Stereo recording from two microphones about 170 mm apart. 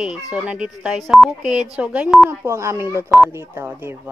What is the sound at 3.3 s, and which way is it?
Speech, 15° right (ahead or behind).